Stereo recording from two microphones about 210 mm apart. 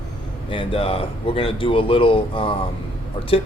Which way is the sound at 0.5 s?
25° left (ahead or behind).